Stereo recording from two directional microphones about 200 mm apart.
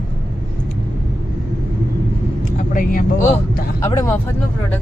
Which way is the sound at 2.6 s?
40° left (ahead or behind).